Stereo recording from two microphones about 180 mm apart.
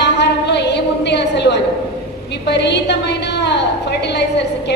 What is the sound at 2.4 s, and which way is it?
A woman's voice, 70° left (ahead or behind).